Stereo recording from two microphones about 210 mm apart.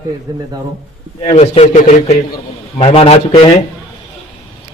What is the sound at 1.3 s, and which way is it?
A man's voice, 30° left (ahead or behind).